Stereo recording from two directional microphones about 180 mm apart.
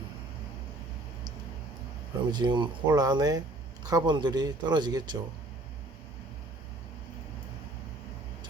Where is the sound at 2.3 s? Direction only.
25° right (ahead or behind).